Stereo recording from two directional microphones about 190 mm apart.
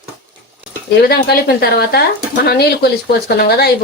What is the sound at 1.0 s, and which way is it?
Speech, 55° left (ahead or behind).